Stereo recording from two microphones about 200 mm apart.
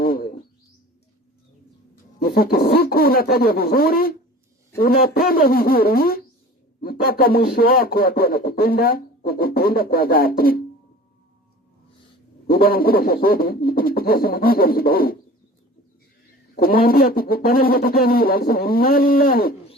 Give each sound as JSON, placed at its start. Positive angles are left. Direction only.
{"t": 0.0, "sound": "bird", "side_deg": 45}
{"t": 2.1, "sound": "speech", "side_deg": 50}
{"t": 12.5, "sound": "speech", "side_deg": 45}
{"t": 16.6, "sound": "speech", "side_deg": 45}